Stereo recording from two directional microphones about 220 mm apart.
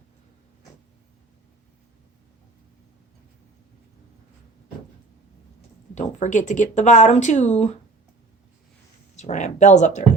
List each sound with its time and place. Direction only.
5.9 s speech: 30° left (ahead or behind)
9.1 s speech: 35° left (ahead or behind)